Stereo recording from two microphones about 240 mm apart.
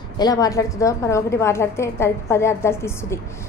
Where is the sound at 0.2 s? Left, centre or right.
Centre.